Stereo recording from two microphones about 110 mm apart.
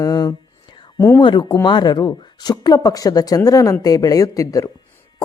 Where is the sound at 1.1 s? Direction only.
45° left (ahead or behind).